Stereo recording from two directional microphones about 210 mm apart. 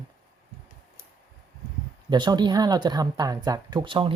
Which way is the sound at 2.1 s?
20° right (ahead or behind).